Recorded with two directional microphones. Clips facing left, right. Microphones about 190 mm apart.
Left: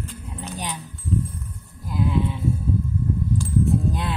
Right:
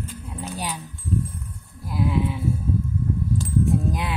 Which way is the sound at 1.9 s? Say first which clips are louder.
Even; 10° right (ahead or behind).